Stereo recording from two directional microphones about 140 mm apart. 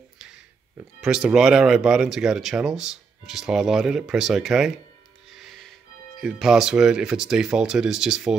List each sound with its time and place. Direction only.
1.0 s speech: 5° right (ahead or behind)
5.3 s music: centre (ahead or behind)
6.2 s speech: 5° right (ahead or behind)